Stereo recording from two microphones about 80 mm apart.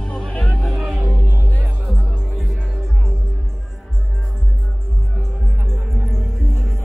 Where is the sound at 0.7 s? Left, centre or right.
Centre.